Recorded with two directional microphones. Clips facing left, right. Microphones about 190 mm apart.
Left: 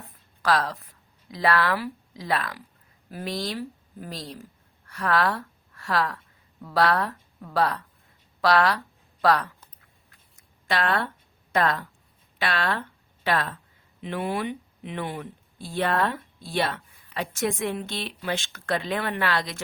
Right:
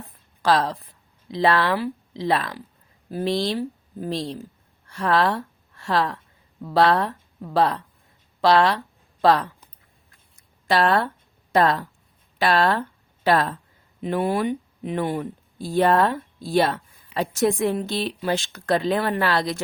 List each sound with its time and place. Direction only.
0.4 s speech: 30° right (ahead or behind)
10.7 s speech: 35° right (ahead or behind)